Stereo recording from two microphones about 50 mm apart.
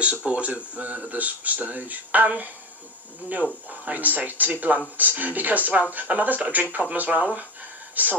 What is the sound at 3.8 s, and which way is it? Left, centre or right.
Speech, right.